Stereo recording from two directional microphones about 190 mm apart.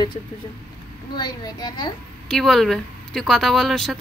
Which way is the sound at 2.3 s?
Centre (ahead or behind).